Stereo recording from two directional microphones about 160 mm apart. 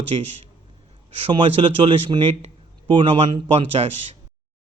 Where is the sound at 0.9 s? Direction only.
35° right (ahead or behind).